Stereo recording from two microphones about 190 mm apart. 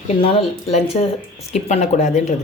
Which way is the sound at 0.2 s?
30° left (ahead or behind).